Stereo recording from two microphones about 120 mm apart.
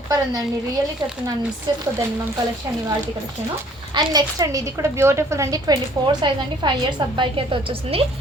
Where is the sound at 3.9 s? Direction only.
35° right (ahead or behind).